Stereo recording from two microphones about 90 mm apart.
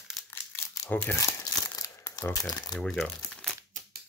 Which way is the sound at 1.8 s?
40° left (ahead or behind).